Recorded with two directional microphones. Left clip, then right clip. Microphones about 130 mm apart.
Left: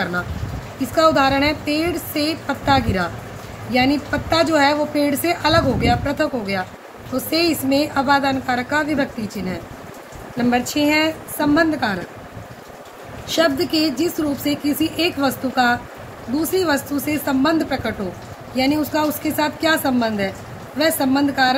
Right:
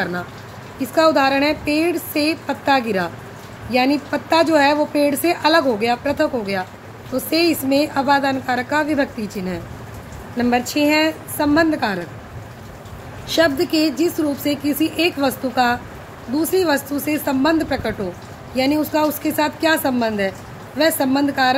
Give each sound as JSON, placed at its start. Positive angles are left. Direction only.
{"t": 0.9, "sound": "a woman's voice", "side_deg": -35}
{"t": 13.3, "sound": "speech", "side_deg": -40}